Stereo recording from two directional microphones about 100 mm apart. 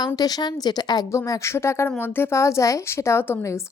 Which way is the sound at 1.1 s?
30° left (ahead or behind).